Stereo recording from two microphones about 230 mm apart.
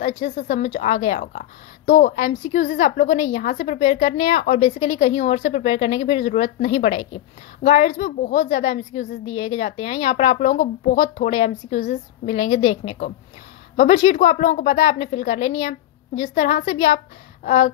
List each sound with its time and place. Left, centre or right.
0.0 s a woman's voice: left